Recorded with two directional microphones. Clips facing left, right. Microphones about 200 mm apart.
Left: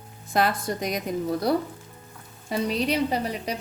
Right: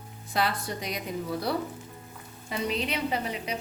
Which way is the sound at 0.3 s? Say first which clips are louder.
Left 5 dB; 45° left (ahead or behind).